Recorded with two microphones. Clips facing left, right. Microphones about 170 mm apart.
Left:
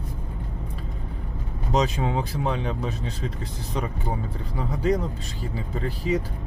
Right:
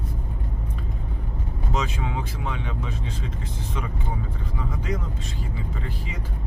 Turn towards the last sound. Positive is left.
turn(degrees=40)  # may be behind; listen again after turning